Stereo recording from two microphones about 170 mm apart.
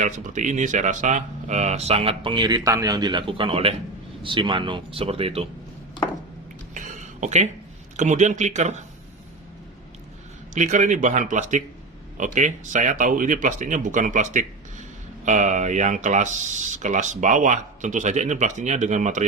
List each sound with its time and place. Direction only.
0.0 s speech: 45° right (ahead or behind)
6.7 s a sound: 45° right (ahead or behind)
7.9 s speech: 45° right (ahead or behind)
10.5 s speech: 45° right (ahead or behind)